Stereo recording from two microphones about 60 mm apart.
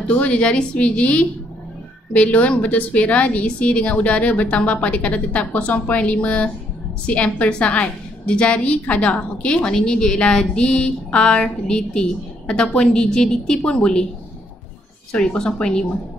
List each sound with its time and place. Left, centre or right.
0.0 s a woman's voice: left
15.1 s a woman's voice: centre